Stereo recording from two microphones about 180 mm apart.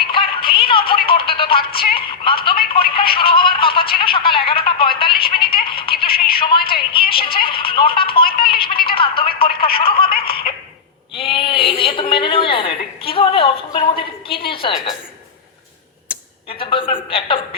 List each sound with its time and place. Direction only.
0.1 s music: 30° left (ahead or behind)
2.7 s a sound: 30° left (ahead or behind)
5.2 s a woman's voice: 30° left (ahead or behind)
6.0 s telephone: 30° left (ahead or behind)
6.4 s a woman's voice: 30° left (ahead or behind)
9.4 s telephone: 30° left (ahead or behind)
9.7 s speech: 30° left (ahead or behind)
11.2 s a sound: 30° left (ahead or behind)
13.9 s a woman's voice: 30° left (ahead or behind)
16.5 s a woman's voice: 30° left (ahead or behind)